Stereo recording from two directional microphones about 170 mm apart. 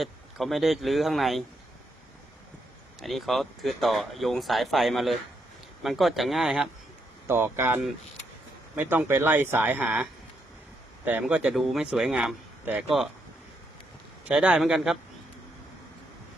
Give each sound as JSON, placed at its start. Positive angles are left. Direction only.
{"t": 0.0, "sound": "speech", "side_deg": 0}
{"t": 3.0, "sound": "speech", "side_deg": 0}
{"t": 7.3, "sound": "speech", "side_deg": -15}
{"t": 14.3, "sound": "speech", "side_deg": -10}